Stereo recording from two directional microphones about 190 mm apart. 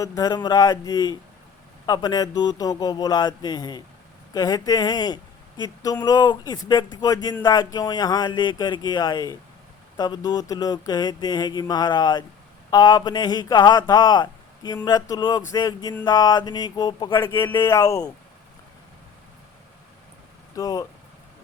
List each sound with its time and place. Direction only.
0.2 s speech: 20° left (ahead or behind)
20.6 s speech: 20° left (ahead or behind)